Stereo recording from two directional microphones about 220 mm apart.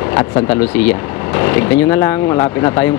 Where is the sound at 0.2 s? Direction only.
15° left (ahead or behind).